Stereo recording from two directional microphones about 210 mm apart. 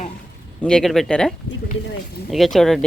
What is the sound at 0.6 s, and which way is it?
Speech, 5° left (ahead or behind).